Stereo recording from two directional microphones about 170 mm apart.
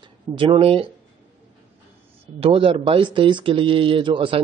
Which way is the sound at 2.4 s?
35° right (ahead or behind).